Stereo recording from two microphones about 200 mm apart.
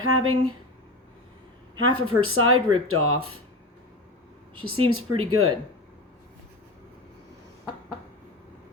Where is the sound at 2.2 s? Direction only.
90° right.